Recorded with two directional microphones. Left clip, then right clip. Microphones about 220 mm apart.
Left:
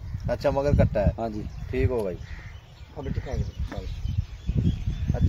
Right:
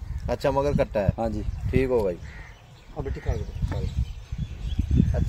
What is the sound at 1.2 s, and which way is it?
Speech, 45° right (ahead or behind).